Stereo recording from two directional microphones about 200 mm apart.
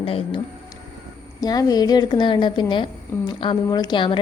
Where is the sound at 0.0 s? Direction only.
30° left (ahead or behind).